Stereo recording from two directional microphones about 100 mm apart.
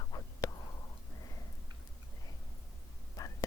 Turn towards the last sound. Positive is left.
turn(degrees=35)  # may be behind; listen again after turning